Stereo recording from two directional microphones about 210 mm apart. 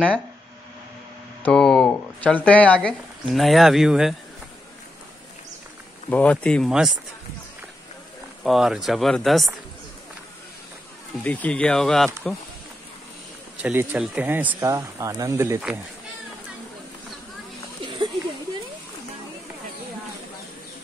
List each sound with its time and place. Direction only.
1.4 s speech: 5° left (ahead or behind)
6.0 s speech: 5° left (ahead or behind)
8.5 s speech: centre (ahead or behind)
11.2 s speech: 5° left (ahead or behind)
13.6 s speech: 5° right (ahead or behind)
17.8 s a sound: 20° right (ahead or behind)